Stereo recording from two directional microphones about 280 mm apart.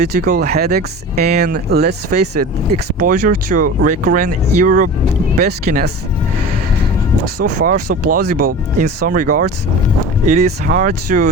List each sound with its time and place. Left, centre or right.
0.2 s speech: right
7.4 s speech: right